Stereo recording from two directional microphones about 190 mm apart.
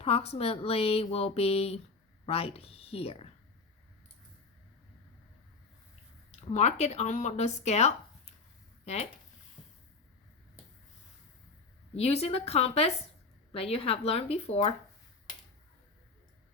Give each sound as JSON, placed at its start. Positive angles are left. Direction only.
{"t": 0.0, "sound": "speech", "side_deg": 30}
{"t": 6.5, "sound": "speech", "side_deg": 35}
{"t": 11.9, "sound": "speech", "side_deg": 35}